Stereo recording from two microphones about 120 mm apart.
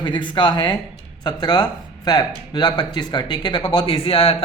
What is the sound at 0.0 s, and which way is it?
Speech, 40° left (ahead or behind).